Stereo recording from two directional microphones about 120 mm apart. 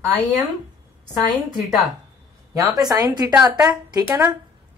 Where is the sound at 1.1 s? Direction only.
Centre (ahead or behind).